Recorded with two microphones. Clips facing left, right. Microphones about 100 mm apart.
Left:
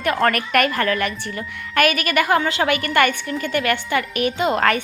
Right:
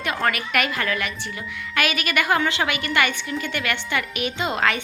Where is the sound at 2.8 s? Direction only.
50° left (ahead or behind).